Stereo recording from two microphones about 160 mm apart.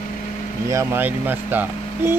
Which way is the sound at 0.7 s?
15° right (ahead or behind).